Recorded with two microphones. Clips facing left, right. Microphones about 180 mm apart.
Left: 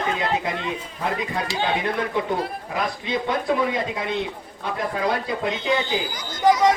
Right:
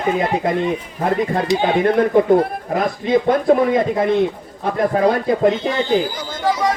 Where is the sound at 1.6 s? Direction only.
50° right (ahead or behind).